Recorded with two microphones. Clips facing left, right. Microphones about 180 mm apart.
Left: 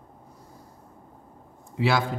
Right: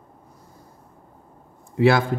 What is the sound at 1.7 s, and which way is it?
Speech, 55° right (ahead or behind).